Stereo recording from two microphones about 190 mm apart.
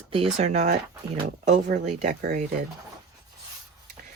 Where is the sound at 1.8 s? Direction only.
40° right (ahead or behind).